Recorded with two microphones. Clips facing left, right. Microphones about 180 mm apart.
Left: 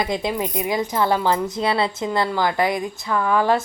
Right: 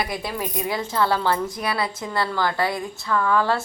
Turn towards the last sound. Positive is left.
turn(degrees=15)  # may be behind; listen again after turning